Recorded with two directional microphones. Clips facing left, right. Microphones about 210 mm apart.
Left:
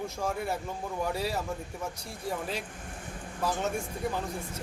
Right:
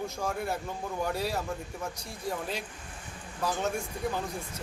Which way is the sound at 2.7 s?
50° left (ahead or behind).